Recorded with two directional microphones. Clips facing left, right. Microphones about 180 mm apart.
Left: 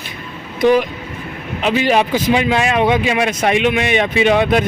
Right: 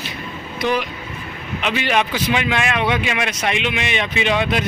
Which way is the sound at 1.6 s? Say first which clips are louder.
Left 5 dB; 40° left (ahead or behind).